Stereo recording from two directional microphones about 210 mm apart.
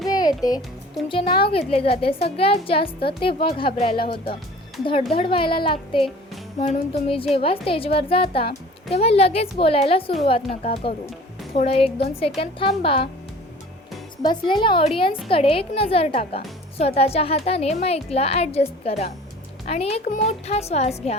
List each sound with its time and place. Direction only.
0.1 s music: 20° left (ahead or behind)
1.0 s a woman's voice: 25° left (ahead or behind)
5.1 s a woman's voice: 25° left (ahead or behind)
14.2 s a woman's voice: 20° left (ahead or behind)